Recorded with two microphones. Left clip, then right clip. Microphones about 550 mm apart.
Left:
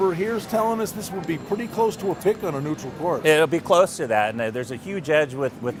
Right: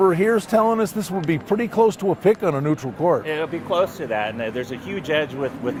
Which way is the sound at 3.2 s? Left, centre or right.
Left.